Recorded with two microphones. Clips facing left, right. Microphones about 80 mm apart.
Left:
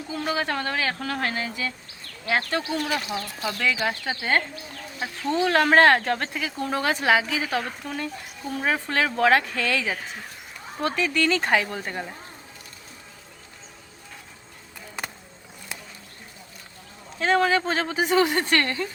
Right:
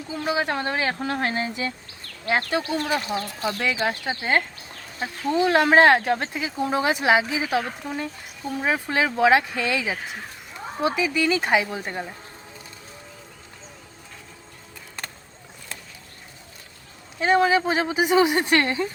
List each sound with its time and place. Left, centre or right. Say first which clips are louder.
0.3 s speech: right 3 dB; centre
3.6 s a woman's voice: left 1 dB; right; by 12.1 s centre
15.0 s music: left 3 dB; centre
17.2 s speech: right 2 dB; centre